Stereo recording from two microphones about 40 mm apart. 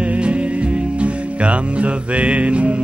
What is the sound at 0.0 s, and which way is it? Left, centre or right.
Music, right.